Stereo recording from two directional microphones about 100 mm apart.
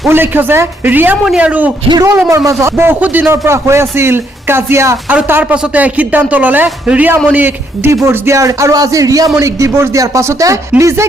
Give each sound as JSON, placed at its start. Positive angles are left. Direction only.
{"t": 0.1, "sound": "speech", "side_deg": -20}
{"t": 1.9, "sound": "speech", "side_deg": -40}
{"t": 5.0, "sound": "speech", "side_deg": -20}